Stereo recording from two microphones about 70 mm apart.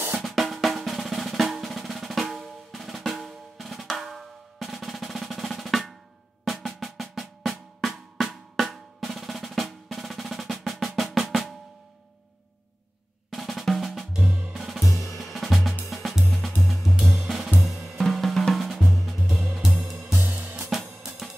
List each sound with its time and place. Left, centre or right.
0.2 s drum: centre
13.3 s drum: centre
14.2 s music: right
14.5 s music: centre
14.9 s drum kit: left
15.1 s drum: centre
15.9 s music: centre
16.6 s drum kit: centre
19.5 s music: centre
20.1 s music: right
21.0 s drum kit: centre